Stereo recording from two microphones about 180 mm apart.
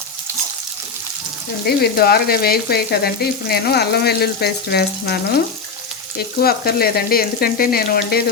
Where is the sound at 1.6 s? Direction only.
60° left (ahead or behind).